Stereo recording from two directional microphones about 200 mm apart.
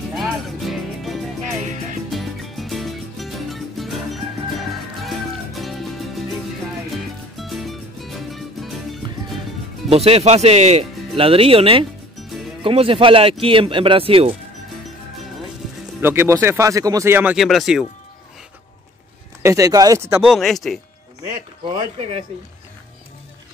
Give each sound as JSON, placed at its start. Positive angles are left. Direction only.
{"t": 0.1, "sound": "music", "side_deg": 0}
{"t": 9.8, "sound": "speech", "side_deg": -30}
{"t": 16.0, "sound": "speech", "side_deg": -10}
{"t": 19.4, "sound": "speech", "side_deg": -15}
{"t": 20.2, "sound": "speech", "side_deg": 0}